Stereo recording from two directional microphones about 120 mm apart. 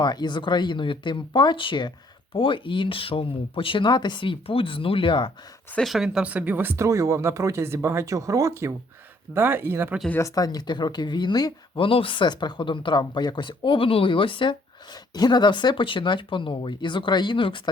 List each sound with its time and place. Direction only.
0.0 s speech: 35° left (ahead or behind)
5.7 s speech: centre (ahead or behind); by 10.0 s 20° right (ahead or behind)
10.1 s speech: 25° left (ahead or behind)
11.9 s speech: 45° left (ahead or behind)